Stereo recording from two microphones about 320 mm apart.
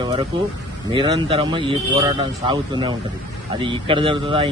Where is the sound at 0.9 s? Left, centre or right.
Centre.